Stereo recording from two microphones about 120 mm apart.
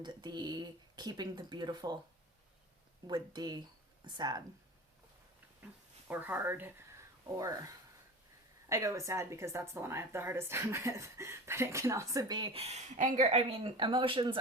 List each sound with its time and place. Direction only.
0.0 s speech: 35° right (ahead or behind)
3.1 s speech: 35° right (ahead or behind)
6.1 s a woman's voice: 15° right (ahead or behind)
8.7 s a woman's voice: 25° right (ahead or behind)
12.5 s speech: 65° right (ahead or behind); by 13.4 s 80° right
13.5 s speech: 45° right (ahead or behind)